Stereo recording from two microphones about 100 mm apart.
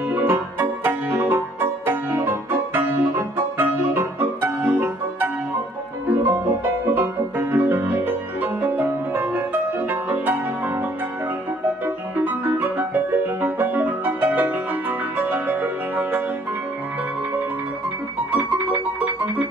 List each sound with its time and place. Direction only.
0.1 s music: 20° right (ahead or behind)
18.3 s music: 15° right (ahead or behind)